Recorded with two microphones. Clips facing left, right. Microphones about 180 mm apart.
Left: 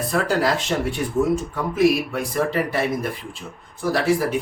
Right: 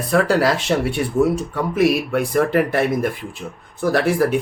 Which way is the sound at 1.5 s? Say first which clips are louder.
Even; 65° right (ahead or behind).